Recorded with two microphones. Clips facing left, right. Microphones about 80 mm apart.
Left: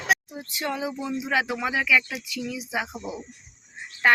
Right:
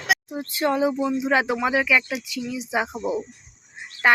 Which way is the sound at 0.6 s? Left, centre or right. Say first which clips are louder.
Right 8 dB; right.